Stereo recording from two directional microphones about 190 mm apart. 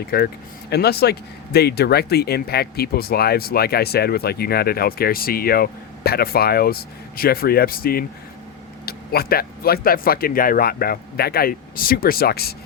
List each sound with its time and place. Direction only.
0.1 s speech: 55° left (ahead or behind)